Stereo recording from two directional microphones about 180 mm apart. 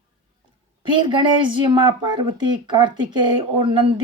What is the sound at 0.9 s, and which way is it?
Speech, 25° right (ahead or behind).